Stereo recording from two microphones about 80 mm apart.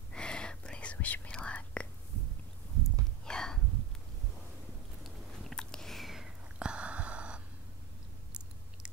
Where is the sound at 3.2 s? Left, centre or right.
Centre.